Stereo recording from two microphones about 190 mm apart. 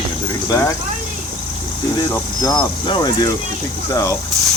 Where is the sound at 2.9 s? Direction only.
20° left (ahead or behind).